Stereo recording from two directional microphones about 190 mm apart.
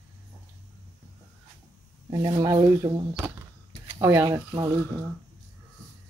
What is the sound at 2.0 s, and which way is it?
Speech, 20° right (ahead or behind).